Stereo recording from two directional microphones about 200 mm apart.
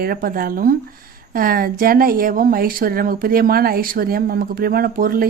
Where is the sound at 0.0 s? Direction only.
45° right (ahead or behind).